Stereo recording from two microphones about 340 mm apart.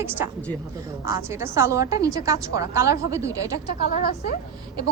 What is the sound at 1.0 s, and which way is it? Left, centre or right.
A woman's voice, centre.